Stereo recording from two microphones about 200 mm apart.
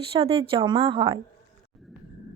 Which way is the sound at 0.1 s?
25° right (ahead or behind).